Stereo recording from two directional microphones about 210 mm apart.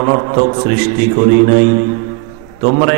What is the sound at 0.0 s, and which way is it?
Speech, 25° right (ahead or behind).